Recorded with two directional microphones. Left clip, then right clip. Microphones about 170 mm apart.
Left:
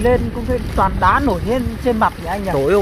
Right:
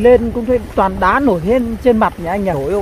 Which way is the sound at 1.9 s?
55° right (ahead or behind).